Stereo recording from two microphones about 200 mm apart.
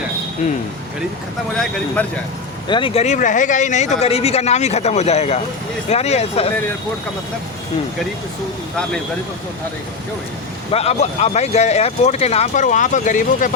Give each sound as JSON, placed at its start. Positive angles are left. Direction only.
{"t": 2.0, "sound": "speech", "side_deg": 5}
{"t": 2.6, "sound": "speech", "side_deg": 25}
{"t": 10.7, "sound": "speech", "side_deg": 30}